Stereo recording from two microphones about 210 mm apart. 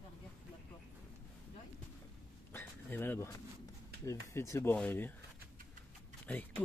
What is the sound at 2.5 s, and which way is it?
Speech, 10° left (ahead or behind).